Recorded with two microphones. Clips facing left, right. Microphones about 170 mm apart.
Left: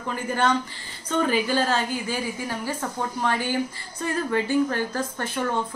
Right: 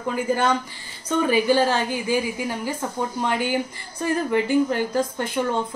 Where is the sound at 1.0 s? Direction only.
10° right (ahead or behind).